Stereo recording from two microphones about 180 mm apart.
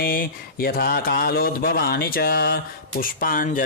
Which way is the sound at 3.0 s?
50° left (ahead or behind).